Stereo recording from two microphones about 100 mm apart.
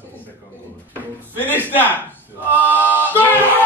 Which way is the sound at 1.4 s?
20° right (ahead or behind).